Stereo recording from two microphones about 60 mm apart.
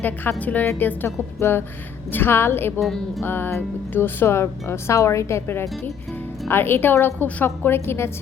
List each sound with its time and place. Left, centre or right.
0.3 s speech: left
1.0 s a woman's voice: left
2.8 s music: centre
3.2 s a woman's voice: left